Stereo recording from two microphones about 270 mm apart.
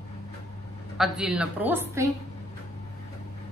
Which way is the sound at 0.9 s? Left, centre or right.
Centre.